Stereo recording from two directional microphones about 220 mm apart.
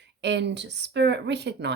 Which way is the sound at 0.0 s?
50° right (ahead or behind).